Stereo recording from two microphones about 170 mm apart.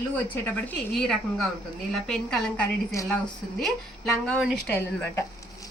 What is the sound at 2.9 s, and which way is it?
Speech, 20° left (ahead or behind).